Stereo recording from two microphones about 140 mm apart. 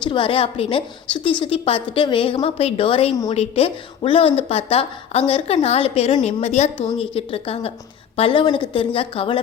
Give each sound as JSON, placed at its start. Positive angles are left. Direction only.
{"t": 0.0, "sound": "a woman's voice", "side_deg": 35}
{"t": 6.7, "sound": "a woman's voice", "side_deg": 40}